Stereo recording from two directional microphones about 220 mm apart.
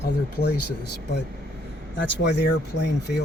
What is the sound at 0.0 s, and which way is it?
Speech, 45° left (ahead or behind).